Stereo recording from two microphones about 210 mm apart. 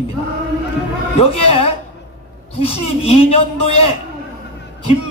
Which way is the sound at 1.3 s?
30° left (ahead or behind).